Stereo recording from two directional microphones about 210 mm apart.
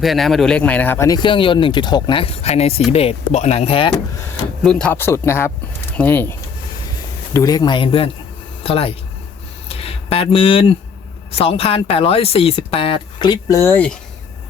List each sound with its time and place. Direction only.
0.0 s speech: centre (ahead or behind); by 3.9 s 25° left (ahead or behind)
4.6 s speech: 5° left (ahead or behind)
7.3 s speech: 15° left (ahead or behind)
9.6 s a sound: 30° left (ahead or behind)
11.3 s speech: 25° left (ahead or behind); by 13.9 s 10° left (ahead or behind)